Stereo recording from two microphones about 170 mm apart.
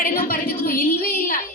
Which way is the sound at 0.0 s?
60° left (ahead or behind).